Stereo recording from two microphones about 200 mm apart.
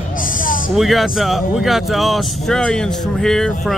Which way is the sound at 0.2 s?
45° left (ahead or behind).